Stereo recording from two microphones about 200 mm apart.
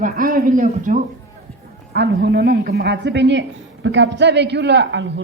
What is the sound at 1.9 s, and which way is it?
A woman's voice, 60° right (ahead or behind).